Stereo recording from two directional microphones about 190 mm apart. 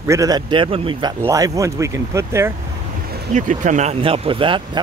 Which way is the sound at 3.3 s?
40° right (ahead or behind).